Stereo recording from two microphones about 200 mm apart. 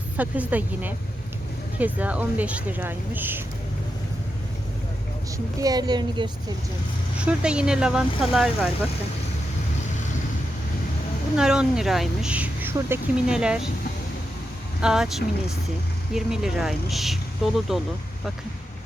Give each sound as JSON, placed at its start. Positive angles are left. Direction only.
{"t": 0.2, "sound": "speech", "side_deg": -10}
{"t": 5.5, "sound": "a woman's voice", "side_deg": -20}
{"t": 7.2, "sound": "speech", "side_deg": -5}
{"t": 11.3, "sound": "speech", "side_deg": -5}
{"t": 14.8, "sound": "speech", "side_deg": -5}